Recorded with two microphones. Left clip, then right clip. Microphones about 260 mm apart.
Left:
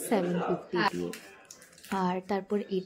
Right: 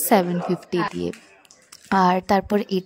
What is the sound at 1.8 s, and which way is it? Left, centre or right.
A woman's voice, right.